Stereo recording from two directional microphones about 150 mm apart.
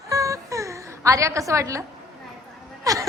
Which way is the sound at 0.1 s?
20° right (ahead or behind).